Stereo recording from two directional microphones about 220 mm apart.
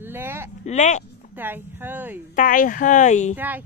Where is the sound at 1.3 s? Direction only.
10° right (ahead or behind).